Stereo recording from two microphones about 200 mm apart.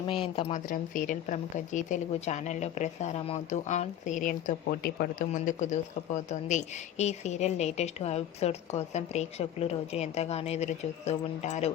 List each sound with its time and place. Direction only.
0.0 s speech: 25° left (ahead or behind)
0.5 s a woman's voice: 40° left (ahead or behind)
7.0 s a woman's voice: 35° left (ahead or behind)